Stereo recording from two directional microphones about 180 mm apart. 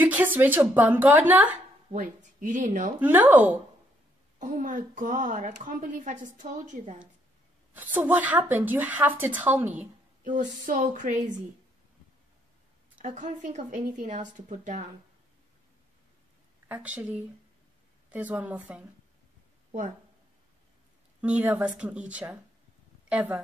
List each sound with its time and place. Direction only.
0.0 s a woman's voice: 10° right (ahead or behind)
1.9 s speech: 45° right (ahead or behind)
3.0 s a woman's voice: 10° right (ahead or behind)
4.4 s a woman's voice: 45° right (ahead or behind)
7.7 s a woman's voice: 10° right (ahead or behind)
10.2 s a woman's voice: 45° right (ahead or behind)
12.9 s a woman's voice: 45° right (ahead or behind)
16.6 s a woman's voice: 10° right (ahead or behind)
21.4 s a woman's voice: 10° right (ahead or behind)